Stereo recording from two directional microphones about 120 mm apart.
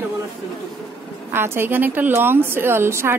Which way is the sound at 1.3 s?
20° right (ahead or behind).